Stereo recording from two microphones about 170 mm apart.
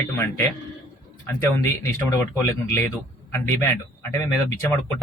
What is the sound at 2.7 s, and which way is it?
A man's voice, 15° left (ahead or behind).